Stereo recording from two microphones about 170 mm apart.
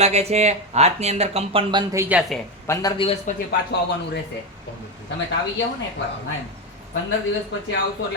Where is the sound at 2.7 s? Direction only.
20° left (ahead or behind).